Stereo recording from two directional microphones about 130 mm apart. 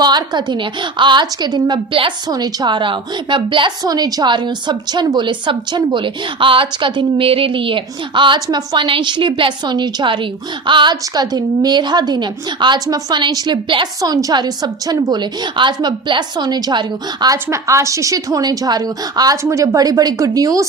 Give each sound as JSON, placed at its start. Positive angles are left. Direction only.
{"t": 0.0, "sound": "a woman's voice", "side_deg": -30}